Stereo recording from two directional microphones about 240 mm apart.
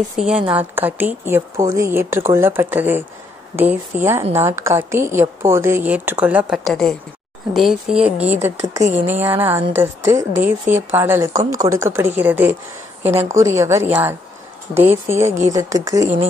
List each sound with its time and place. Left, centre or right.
0.2 s a woman's voice: centre
8.8 s speech: right
9.2 s a woman's voice: centre